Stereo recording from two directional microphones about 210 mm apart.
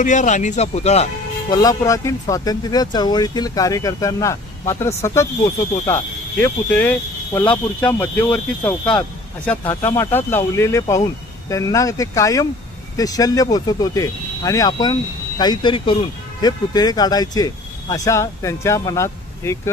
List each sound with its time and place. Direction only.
0.0 s a man's voice: 35° left (ahead or behind)
1.5 s speech: 15° left (ahead or behind)